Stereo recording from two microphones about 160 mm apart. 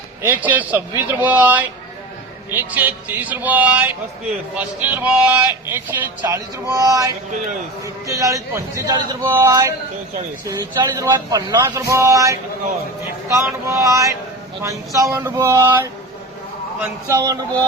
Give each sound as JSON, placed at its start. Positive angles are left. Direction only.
{"t": 0.2, "sound": "speech", "side_deg": -10}